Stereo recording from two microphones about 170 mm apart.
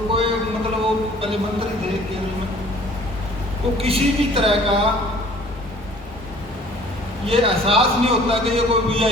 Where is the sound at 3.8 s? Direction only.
35° right (ahead or behind).